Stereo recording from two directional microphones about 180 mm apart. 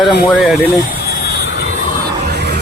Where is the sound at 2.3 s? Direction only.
65° right (ahead or behind).